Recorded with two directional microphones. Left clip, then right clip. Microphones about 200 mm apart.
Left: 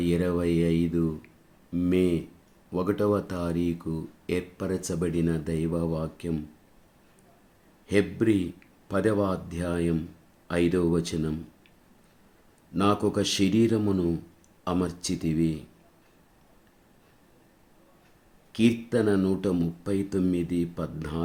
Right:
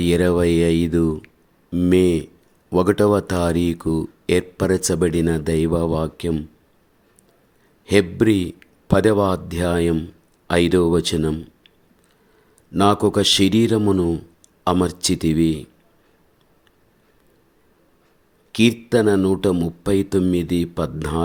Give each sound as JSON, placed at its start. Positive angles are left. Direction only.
{"t": 0.0, "sound": "speech", "side_deg": -45}
{"t": 7.9, "sound": "speech", "side_deg": -45}
{"t": 12.7, "sound": "speech", "side_deg": -40}
{"t": 18.5, "sound": "speech", "side_deg": -45}